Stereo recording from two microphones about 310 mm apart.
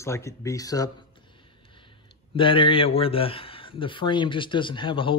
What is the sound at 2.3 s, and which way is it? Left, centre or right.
Speech, centre.